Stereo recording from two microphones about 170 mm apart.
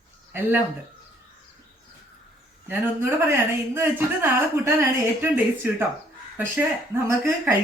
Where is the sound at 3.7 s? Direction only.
15° right (ahead or behind).